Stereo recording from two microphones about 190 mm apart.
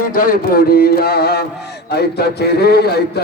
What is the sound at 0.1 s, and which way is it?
Music, 50° left (ahead or behind).